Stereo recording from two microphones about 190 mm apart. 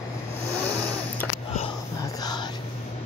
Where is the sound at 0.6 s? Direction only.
5° left (ahead or behind).